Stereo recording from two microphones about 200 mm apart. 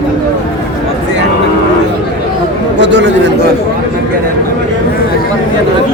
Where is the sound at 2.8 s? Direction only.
60° right (ahead or behind).